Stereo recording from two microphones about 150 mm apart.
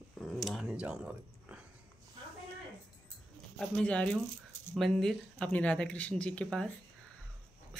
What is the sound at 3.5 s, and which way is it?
Speech, 5° left (ahead or behind).